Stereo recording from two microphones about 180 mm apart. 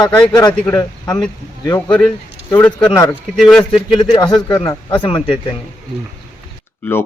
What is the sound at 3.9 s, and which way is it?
Speech, 25° left (ahead or behind).